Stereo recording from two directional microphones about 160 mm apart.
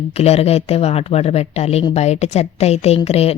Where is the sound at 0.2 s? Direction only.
40° left (ahead or behind).